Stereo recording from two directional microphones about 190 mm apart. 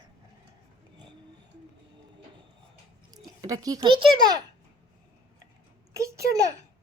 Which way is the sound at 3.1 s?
20° right (ahead or behind).